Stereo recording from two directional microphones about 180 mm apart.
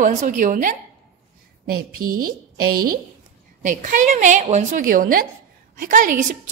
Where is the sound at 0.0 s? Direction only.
45° right (ahead or behind).